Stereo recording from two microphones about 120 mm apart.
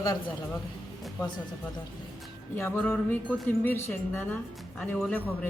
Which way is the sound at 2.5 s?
15° left (ahead or behind).